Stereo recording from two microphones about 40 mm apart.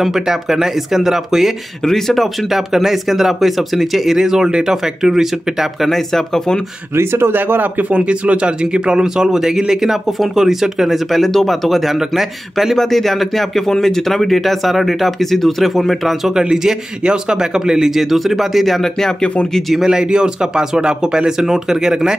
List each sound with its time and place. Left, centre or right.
0.0 s speech: centre
1.9 s speech: centre
2.5 s speech: centre
5.9 s speech: centre
7.0 s speech: right
7.9 s speech: right; by 11.0 s centre
11.1 s speech: centre
12.7 s speech: centre
16.3 s speech: centre
18.8 s speech: centre
19.7 s speech: centre
21.4 s speech: centre